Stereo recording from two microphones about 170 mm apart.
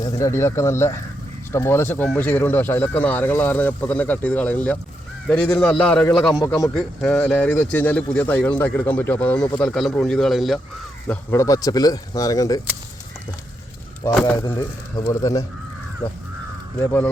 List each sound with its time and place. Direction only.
0.0 s a man's voice: 15° left (ahead or behind); by 10.6 s centre (ahead or behind)
11.1 s speech: 15° left (ahead or behind)
14.3 s speech: 15° left (ahead or behind)